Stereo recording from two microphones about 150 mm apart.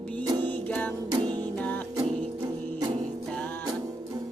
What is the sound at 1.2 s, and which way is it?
Music, 30° right (ahead or behind).